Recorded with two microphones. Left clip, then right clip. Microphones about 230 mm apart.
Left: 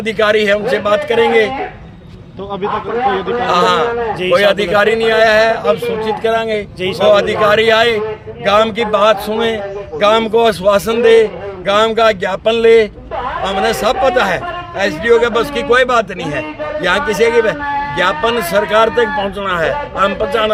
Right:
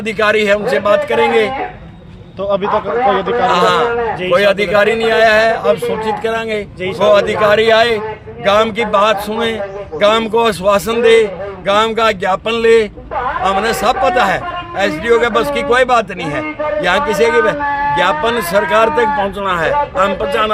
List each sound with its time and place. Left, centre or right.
0.0 s a man's voice: centre
3.4 s a man's voice: centre